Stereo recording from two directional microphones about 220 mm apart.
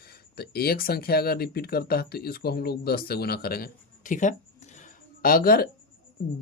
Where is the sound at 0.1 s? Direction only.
45° left (ahead or behind).